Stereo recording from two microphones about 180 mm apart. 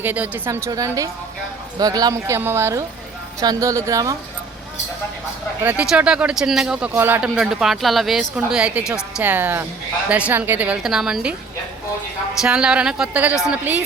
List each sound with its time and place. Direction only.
0.0 s a woman's voice: 10° right (ahead or behind)
5.6 s a woman's voice: 5° right (ahead or behind)
12.4 s a woman's voice: 5° right (ahead or behind)